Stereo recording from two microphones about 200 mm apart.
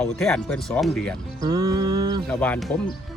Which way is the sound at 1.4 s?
20° right (ahead or behind).